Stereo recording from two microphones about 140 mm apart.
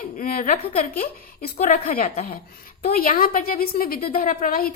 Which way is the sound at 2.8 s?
80° left.